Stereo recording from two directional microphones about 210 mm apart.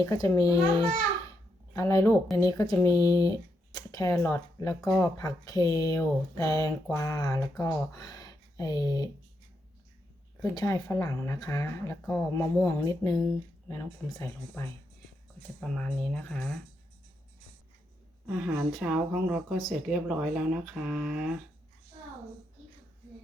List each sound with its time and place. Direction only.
0.0 s speech: 15° left (ahead or behind)
10.4 s speech: 15° left (ahead or behind)
18.3 s speech: centre (ahead or behind)